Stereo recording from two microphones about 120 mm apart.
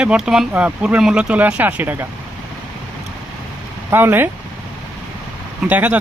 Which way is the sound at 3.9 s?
20° right (ahead or behind).